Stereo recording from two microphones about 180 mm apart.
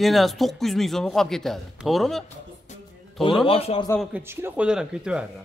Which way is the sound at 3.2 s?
30° left (ahead or behind).